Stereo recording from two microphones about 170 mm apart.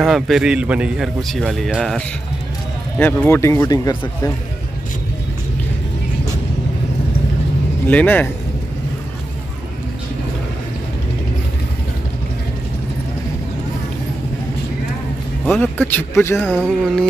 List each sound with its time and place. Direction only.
0.0 s a man's voice: centre (ahead or behind); by 3.9 s 20° left (ahead or behind)
7.9 s speech: 10° left (ahead or behind)
15.6 s speech: 10° left (ahead or behind)
16.5 s a man's voice: 5° right (ahead or behind)